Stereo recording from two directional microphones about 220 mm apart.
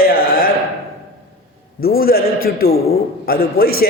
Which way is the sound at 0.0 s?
40° left (ahead or behind).